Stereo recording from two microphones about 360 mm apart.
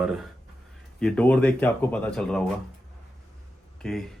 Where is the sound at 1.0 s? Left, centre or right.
Centre.